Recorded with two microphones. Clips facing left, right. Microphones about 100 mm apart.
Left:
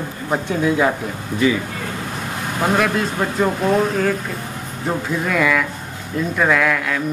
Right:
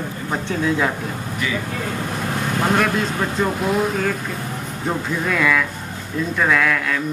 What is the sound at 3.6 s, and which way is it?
Speech, centre (ahead or behind).